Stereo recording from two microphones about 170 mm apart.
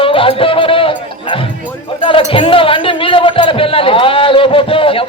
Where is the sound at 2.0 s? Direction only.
30° left (ahead or behind).